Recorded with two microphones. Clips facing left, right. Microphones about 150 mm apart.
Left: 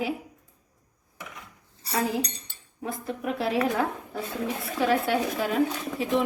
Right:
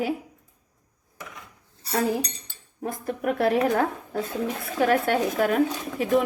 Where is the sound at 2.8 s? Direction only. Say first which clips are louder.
Right 4 dB; 50° right (ahead or behind).